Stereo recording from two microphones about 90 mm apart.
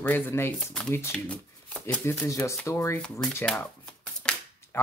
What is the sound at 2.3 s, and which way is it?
Speech, 35° left (ahead or behind).